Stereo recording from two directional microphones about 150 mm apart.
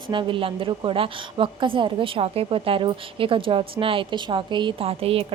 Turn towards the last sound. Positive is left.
turn(degrees=-40)  # may be behind; listen again after turning